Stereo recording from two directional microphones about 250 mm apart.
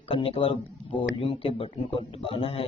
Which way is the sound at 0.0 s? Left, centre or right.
Left.